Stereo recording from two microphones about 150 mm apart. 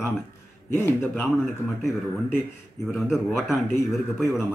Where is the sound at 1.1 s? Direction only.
Centre (ahead or behind).